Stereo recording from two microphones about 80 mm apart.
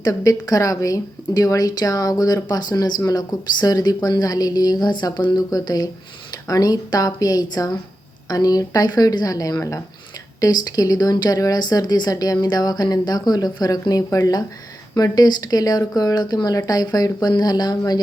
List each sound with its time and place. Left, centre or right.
0.0 s speech: left